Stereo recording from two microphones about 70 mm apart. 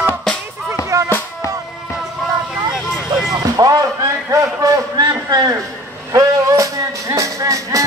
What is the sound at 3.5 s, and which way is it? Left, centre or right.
Music, right.